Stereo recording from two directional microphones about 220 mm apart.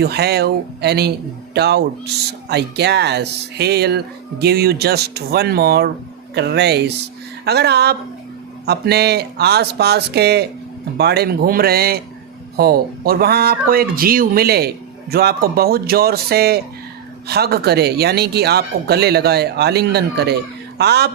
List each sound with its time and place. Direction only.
0.0 s speech: 45° right (ahead or behind)